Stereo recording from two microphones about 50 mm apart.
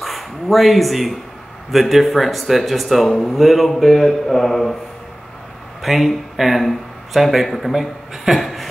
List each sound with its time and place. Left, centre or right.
0.0 s speech: centre
5.8 s speech: centre